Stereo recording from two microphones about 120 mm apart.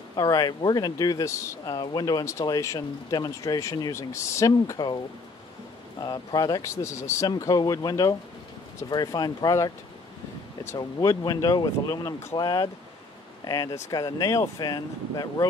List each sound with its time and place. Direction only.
0.1 s speech: 30° left (ahead or behind)
5.9 s speech: 35° left (ahead or behind)
10.8 s speech: 35° left (ahead or behind)